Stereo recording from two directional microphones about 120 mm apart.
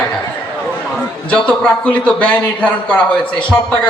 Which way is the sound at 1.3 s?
10° left (ahead or behind).